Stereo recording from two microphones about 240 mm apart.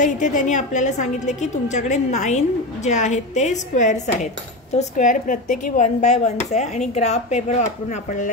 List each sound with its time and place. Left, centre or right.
0.0 s a woman's voice: left